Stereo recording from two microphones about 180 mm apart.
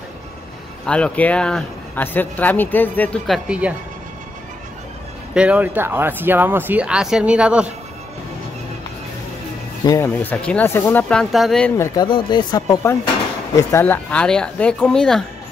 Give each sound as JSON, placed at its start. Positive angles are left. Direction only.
{"t": 0.8, "sound": "speech", "side_deg": 5}
{"t": 3.4, "sound": "speech", "side_deg": -5}
{"t": 5.3, "sound": "speech", "side_deg": -5}
{"t": 9.8, "sound": "speech", "side_deg": 15}
{"t": 11.7, "sound": "speech", "side_deg": 20}